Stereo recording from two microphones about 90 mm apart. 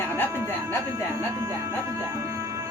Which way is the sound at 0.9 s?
35° right (ahead or behind).